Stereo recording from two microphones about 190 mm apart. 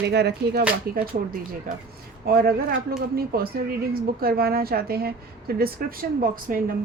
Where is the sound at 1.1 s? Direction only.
45° right (ahead or behind).